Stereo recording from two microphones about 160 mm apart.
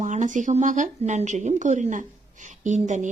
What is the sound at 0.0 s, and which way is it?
Speech, 50° right (ahead or behind).